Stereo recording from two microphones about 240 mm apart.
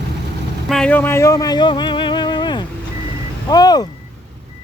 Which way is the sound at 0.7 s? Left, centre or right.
Centre.